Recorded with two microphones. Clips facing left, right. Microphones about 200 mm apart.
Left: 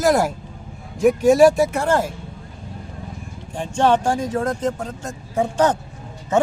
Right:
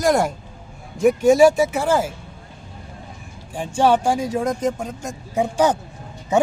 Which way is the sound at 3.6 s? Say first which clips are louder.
Even; 10° right (ahead or behind).